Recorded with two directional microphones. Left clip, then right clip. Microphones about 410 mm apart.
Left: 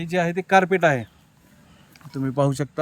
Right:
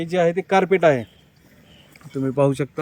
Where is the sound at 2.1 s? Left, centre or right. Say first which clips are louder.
Right 3 dB; centre.